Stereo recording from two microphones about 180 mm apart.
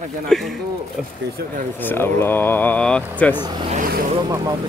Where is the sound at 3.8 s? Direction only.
55° right (ahead or behind).